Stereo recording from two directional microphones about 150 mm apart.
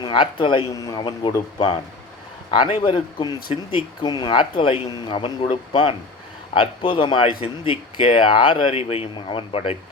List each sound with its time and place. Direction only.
0.0 s speech: 30° left (ahead or behind)